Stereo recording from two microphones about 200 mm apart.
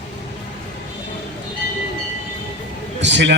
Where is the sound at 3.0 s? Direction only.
60° right (ahead or behind).